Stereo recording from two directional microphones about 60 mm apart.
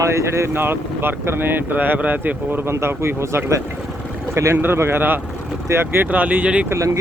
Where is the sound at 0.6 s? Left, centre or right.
Right.